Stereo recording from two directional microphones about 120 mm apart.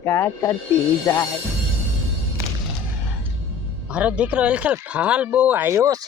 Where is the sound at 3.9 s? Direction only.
10° right (ahead or behind).